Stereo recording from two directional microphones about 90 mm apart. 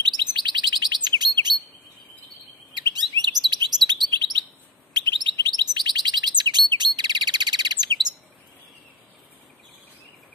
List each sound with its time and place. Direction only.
0.0 s chirp: 55° right (ahead or behind)
2.7 s chirp: 55° right (ahead or behind)
4.9 s chirp: 65° right (ahead or behind)